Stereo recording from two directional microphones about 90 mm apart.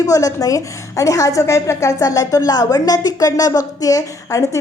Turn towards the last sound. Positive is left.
turn(degrees=40)  # may be behind; listen again after turning